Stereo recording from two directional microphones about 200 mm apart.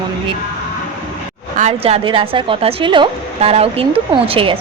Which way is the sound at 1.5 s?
35° right (ahead or behind).